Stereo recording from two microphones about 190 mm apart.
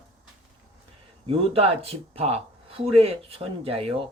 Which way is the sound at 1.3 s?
30° right (ahead or behind).